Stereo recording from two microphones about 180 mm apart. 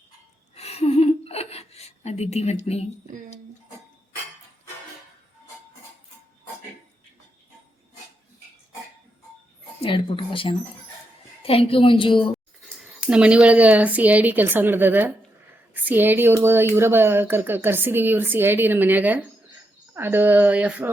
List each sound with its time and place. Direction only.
0.5 s a sound: 35° left (ahead or behind)
9.8 s a woman's voice: 30° left (ahead or behind)
12.6 s speech: 5° right (ahead or behind)